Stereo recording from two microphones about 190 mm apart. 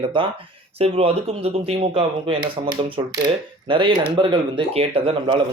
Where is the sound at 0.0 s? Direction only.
25° right (ahead or behind).